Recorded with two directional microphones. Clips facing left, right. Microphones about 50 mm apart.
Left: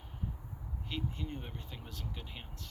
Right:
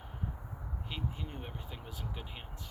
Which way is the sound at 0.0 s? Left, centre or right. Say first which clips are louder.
Right 2 dB; centre.